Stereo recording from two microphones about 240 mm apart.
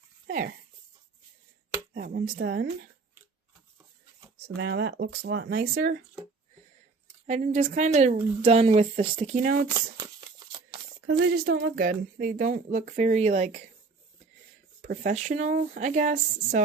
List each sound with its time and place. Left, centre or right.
0.3 s speech: right
1.9 s speech: right
4.4 s speech: right
7.3 s a woman's voice: right
11.0 s speech: right
14.8 s speech: right